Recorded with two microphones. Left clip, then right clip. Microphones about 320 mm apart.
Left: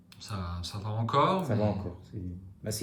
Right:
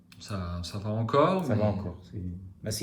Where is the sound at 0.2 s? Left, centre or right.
Centre.